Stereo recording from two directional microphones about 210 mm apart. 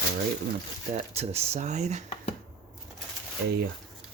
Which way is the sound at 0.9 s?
30° right (ahead or behind).